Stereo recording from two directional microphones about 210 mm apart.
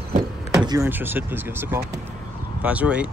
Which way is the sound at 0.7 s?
10° right (ahead or behind).